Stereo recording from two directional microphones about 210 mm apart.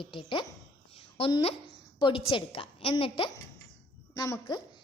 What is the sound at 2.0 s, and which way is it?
A woman's voice, 25° left (ahead or behind).